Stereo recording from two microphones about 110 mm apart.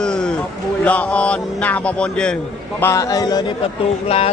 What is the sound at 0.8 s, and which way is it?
Music, 15° left (ahead or behind).